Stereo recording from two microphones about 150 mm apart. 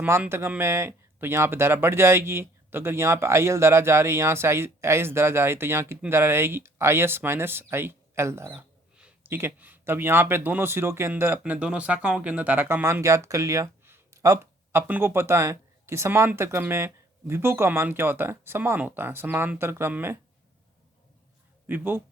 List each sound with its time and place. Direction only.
0.0 s speech: 15° right (ahead or behind)
21.7 s speech: 15° right (ahead or behind)